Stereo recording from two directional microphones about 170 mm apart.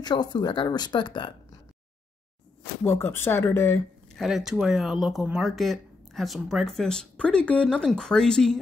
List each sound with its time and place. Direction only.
0.0 s speech: 25° left (ahead or behind)
2.8 s speech: 15° left (ahead or behind)
4.2 s speech: centre (ahead or behind)